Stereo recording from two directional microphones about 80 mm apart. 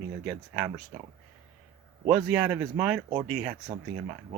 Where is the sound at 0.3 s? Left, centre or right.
Centre.